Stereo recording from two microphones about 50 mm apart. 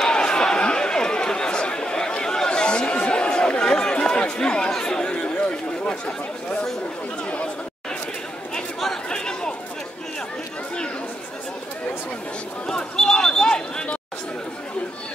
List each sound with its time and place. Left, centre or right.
0.0 s chatter: centre
9.1 s chatter: centre
12.6 s a sound: centre